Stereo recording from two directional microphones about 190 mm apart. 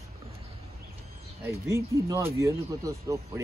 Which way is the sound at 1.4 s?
15° right (ahead or behind).